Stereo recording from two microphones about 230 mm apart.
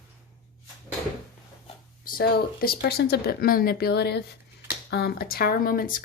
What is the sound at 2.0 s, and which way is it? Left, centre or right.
Speech, left.